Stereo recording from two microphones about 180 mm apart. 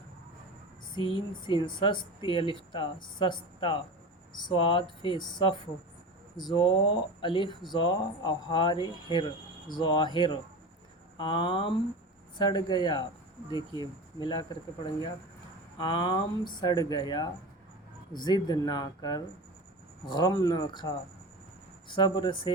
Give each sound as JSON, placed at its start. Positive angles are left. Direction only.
{"t": 0.9, "sound": "speech", "side_deg": 30}
{"t": 14.2, "sound": "speech", "side_deg": 25}
{"t": 15.8, "sound": "speech", "side_deg": 25}